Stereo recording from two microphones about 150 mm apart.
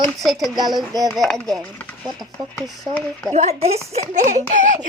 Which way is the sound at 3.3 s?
50° right (ahead or behind).